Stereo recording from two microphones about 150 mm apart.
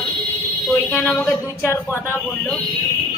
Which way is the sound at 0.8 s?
20° left (ahead or behind).